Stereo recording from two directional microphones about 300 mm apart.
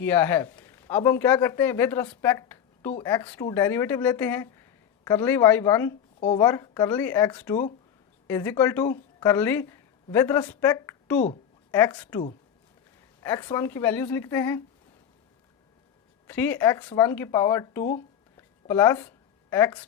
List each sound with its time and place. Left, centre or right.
0.0 s a man's voice: centre
16.2 s speech: centre
18.3 s a sound: centre